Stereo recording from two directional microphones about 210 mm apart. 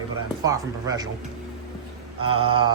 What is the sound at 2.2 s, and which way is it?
Speech, 25° right (ahead or behind).